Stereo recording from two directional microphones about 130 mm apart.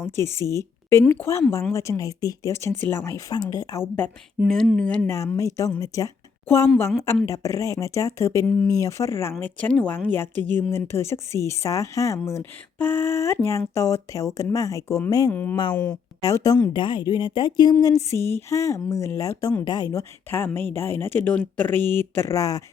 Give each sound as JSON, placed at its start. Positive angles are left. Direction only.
{"t": 0.0, "sound": "speech", "side_deg": 20}
{"t": 4.4, "sound": "speech", "side_deg": 5}
{"t": 7.3, "sound": "speech", "side_deg": 25}
{"t": 9.4, "sound": "speech", "side_deg": 10}
{"t": 15.3, "sound": "speech", "side_deg": 15}
{"t": 16.2, "sound": "speech", "side_deg": 25}